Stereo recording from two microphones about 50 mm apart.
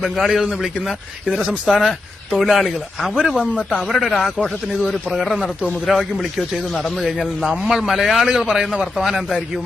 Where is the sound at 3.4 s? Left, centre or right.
Right.